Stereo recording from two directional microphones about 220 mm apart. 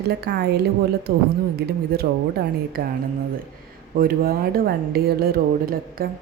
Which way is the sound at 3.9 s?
40° right (ahead or behind).